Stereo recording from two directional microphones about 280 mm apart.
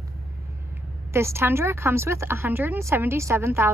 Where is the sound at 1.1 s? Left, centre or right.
Centre.